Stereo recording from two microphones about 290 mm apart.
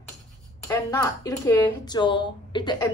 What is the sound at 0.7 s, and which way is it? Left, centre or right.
Speech, centre.